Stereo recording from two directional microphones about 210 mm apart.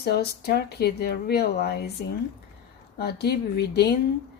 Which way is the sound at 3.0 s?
50° left (ahead or behind).